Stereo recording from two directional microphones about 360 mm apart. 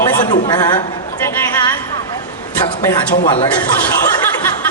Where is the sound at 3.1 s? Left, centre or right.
Centre.